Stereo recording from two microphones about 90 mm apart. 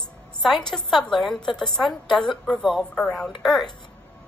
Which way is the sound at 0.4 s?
Centre (ahead or behind).